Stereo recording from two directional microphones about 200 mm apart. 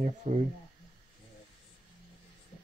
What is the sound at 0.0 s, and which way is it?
Speech, 35° right (ahead or behind).